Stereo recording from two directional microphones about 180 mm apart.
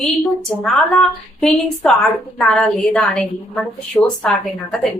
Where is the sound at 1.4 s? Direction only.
Centre (ahead or behind).